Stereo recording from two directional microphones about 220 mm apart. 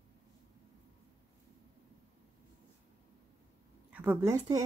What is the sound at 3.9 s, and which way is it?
Speech, 5° right (ahead or behind).